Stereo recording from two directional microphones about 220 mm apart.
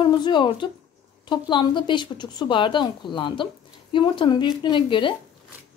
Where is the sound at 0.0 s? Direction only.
20° left (ahead or behind).